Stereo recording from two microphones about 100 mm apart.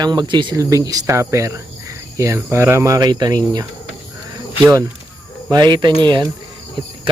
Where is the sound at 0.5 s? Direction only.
35° right (ahead or behind).